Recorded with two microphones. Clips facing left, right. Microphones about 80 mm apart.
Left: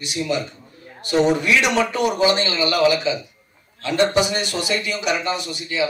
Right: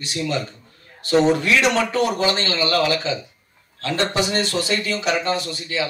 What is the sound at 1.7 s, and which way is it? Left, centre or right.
A man's voice, centre.